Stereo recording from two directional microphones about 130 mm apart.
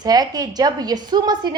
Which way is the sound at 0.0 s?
30° right (ahead or behind).